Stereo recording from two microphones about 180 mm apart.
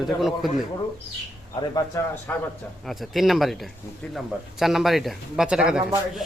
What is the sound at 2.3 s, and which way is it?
Speech, 10° left (ahead or behind).